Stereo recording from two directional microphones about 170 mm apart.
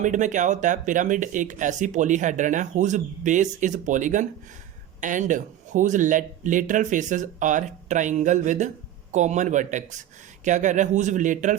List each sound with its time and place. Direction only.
0.0 s speech: 45° right (ahead or behind)